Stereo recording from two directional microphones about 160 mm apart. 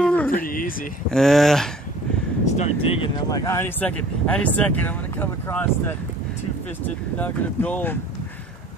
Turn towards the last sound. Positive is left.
turn(degrees=10)  # may be behind; listen again after turning